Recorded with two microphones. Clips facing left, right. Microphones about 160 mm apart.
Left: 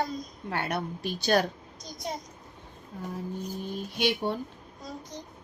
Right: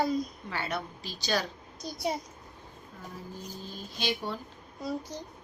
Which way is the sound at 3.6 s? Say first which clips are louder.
Left 7 dB; 65° left (ahead or behind).